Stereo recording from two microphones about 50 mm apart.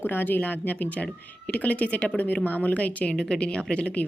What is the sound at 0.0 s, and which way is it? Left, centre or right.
A woman's voice, left.